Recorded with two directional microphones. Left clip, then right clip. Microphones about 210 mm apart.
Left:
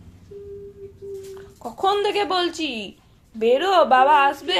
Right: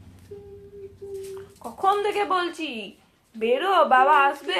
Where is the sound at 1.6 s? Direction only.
40° left (ahead or behind).